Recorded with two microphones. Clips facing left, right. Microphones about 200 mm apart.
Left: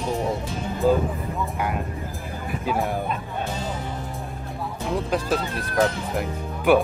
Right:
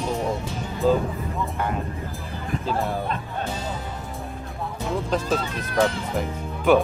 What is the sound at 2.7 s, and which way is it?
Speech, 15° left (ahead or behind).